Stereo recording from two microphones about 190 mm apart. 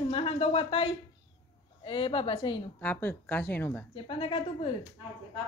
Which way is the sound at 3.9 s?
25° left (ahead or behind).